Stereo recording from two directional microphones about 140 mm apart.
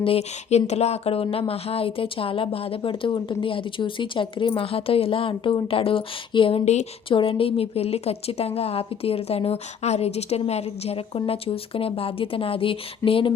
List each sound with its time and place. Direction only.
0.0 s a woman's voice: 45° left (ahead or behind)